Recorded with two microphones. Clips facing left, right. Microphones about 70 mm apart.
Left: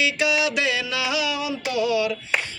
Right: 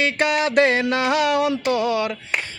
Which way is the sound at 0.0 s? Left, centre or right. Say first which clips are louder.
Right 2 dB; right.